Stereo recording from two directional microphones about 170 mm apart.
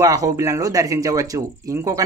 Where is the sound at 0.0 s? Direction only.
20° right (ahead or behind).